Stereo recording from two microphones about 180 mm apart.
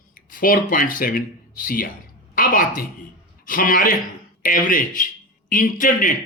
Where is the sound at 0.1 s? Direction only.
50° left (ahead or behind).